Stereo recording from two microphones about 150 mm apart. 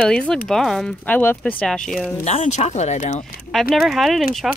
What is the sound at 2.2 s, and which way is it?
Speech, 50° left (ahead or behind).